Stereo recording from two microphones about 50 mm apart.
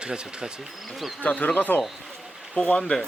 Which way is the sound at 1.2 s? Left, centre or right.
Left.